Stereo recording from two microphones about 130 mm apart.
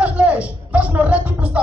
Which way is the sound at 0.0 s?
10° right (ahead or behind).